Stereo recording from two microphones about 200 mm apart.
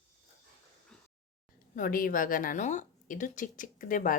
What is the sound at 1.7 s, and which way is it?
A woman's voice, 45° left (ahead or behind).